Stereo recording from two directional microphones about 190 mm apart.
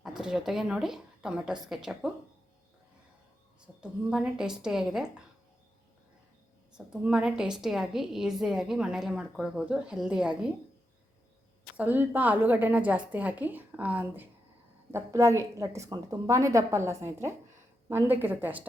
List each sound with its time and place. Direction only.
0.2 s a woman's voice: centre (ahead or behind)
3.6 s a woman's voice: 5° right (ahead or behind)
6.7 s a woman's voice: 5° right (ahead or behind)
11.8 s a woman's voice: 10° right (ahead or behind)